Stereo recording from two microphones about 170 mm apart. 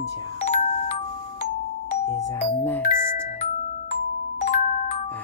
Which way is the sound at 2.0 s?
20° left (ahead or behind).